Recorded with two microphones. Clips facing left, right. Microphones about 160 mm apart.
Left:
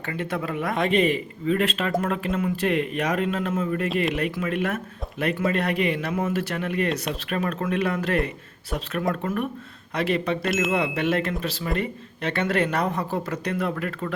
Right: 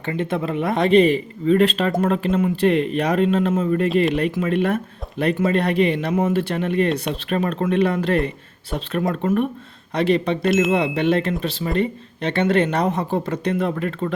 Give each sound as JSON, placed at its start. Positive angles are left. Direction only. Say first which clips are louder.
{"t": 0.0, "sound": "speech", "louder": "right 5 dB", "side_deg": -25}